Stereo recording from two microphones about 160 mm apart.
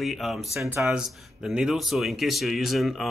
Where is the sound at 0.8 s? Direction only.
5° right (ahead or behind).